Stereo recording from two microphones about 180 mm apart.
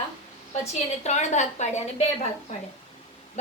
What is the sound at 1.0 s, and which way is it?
A woman's voice, 40° left (ahead or behind).